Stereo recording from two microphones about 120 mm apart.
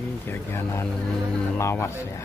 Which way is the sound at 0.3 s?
20° left (ahead or behind).